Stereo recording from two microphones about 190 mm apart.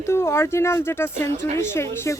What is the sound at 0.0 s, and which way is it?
Speech, 15° left (ahead or behind).